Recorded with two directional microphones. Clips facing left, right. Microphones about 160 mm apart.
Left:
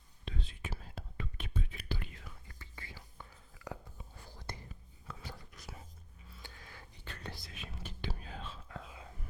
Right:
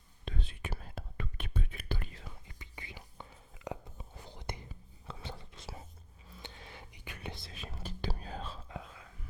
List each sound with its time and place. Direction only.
0.3 s whispering: 60° right (ahead or behind)
2.0 s whispering: 30° right (ahead or behind); by 7.3 s 10° right (ahead or behind)
7.3 s whispering: 30° right (ahead or behind)